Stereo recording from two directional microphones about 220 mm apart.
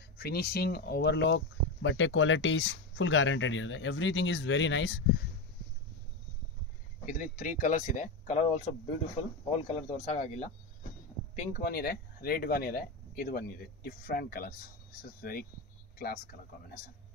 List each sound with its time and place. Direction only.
0.2 s speech: 45° left (ahead or behind)
7.1 s speech: 40° left (ahead or behind)
11.3 s speech: 40° left (ahead or behind)